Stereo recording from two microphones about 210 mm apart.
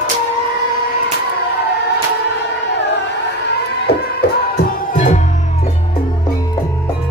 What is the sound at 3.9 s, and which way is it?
Music, 50° left (ahead or behind).